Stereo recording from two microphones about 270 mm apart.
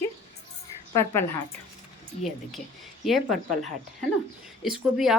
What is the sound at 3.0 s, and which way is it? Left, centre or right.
Speech, centre.